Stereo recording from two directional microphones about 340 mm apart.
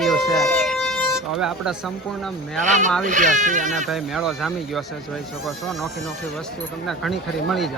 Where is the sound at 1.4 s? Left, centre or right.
Centre.